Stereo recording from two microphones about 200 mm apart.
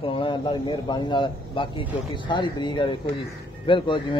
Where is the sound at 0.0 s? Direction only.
25° left (ahead or behind).